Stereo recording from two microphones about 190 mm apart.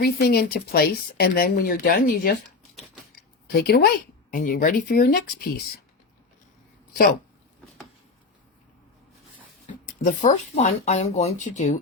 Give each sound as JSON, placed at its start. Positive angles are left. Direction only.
{"t": 0.0, "sound": "speech", "side_deg": 55}
{"t": 9.7, "sound": "a sound", "side_deg": 35}
{"t": 10.0, "sound": "speech", "side_deg": 40}